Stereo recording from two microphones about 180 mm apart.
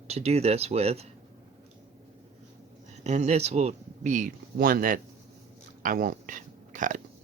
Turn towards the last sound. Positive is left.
turn(degrees=-45)  # may be behind; listen again after turning